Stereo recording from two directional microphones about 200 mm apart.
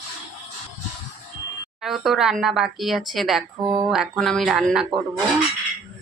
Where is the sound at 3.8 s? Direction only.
Centre (ahead or behind).